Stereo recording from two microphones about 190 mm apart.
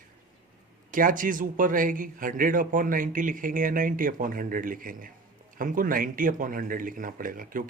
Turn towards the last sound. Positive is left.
turn(degrees=-45)  # may be behind; listen again after turning